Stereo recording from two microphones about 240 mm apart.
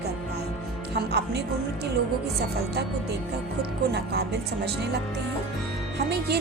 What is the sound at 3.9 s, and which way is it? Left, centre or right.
Speech, right.